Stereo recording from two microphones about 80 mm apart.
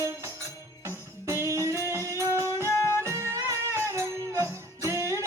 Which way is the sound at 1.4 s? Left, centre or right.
Right.